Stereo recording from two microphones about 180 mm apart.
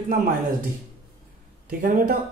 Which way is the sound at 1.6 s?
50° right (ahead or behind).